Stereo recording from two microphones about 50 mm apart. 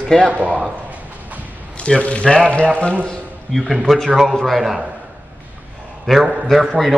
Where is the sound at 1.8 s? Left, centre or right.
Left.